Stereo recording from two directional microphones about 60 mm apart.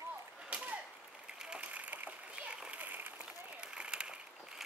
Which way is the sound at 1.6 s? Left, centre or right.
Right.